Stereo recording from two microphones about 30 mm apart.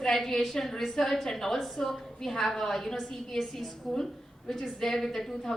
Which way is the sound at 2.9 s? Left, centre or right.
Centre.